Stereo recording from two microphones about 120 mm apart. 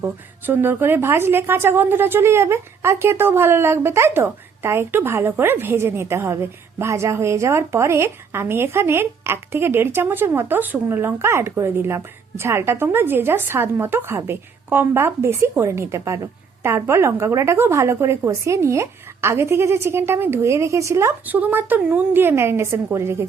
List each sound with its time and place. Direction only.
0.0 s a woman's voice: 20° right (ahead or behind)